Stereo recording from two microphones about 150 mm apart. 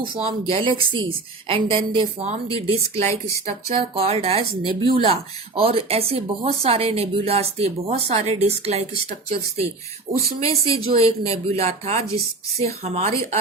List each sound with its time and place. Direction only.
0.0 s speech: 35° right (ahead or behind)
2.2 s speech: 45° right (ahead or behind)
3.1 s speech: 20° left (ahead or behind)
3.4 s speech: 45° right (ahead or behind)
10.7 s speech: 40° right (ahead or behind)